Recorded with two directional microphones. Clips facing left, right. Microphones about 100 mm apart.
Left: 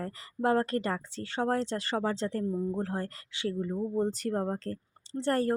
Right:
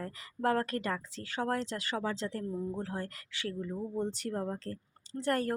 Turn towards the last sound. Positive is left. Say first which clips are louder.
# left 4 dB
turn(degrees=30)  # may be behind; listen again after turning